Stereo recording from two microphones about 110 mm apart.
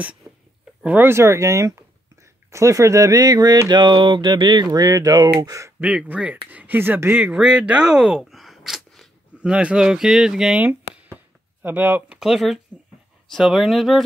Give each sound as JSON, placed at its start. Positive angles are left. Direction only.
{"t": 0.3, "sound": "a sound", "side_deg": -20}
{"t": 0.8, "sound": "speech", "side_deg": -20}
{"t": 5.8, "sound": "speech", "side_deg": -15}
{"t": 10.6, "sound": "a sound", "side_deg": -15}
{"t": 11.6, "sound": "speech", "side_deg": -15}
{"t": 12.2, "sound": "speech", "side_deg": 0}